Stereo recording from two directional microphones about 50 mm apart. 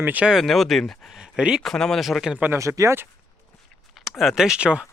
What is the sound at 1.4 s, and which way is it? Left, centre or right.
Speech, centre.